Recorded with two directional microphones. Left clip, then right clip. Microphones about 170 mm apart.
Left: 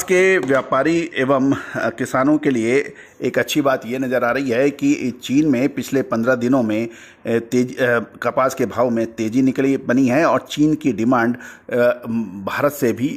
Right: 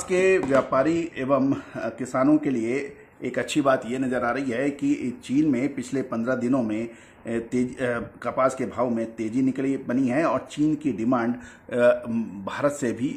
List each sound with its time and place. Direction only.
0.1 s speech: 40° left (ahead or behind)